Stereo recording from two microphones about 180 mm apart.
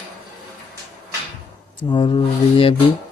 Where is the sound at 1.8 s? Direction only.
25° left (ahead or behind).